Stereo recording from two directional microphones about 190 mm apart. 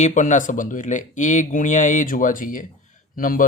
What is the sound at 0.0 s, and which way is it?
Speech, 40° left (ahead or behind).